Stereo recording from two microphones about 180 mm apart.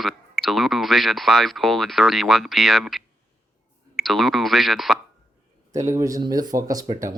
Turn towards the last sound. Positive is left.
turn(degrees=-20)  # may be behind; listen again after turning